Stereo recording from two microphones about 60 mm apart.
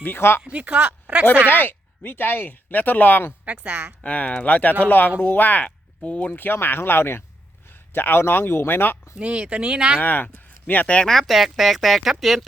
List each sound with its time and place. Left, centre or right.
0.0 s speech: left
0.4 s speech: right
1.5 s speech: left
3.4 s a woman's voice: right
3.7 s speech: right
4.0 s speech: left
9.1 s speech: centre
10.0 s speech: left
11.1 s speech: centre